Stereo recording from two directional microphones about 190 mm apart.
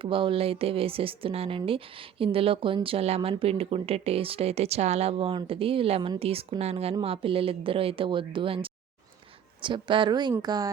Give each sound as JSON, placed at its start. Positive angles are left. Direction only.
{"t": 0.0, "sound": "a woman's voice", "side_deg": -30}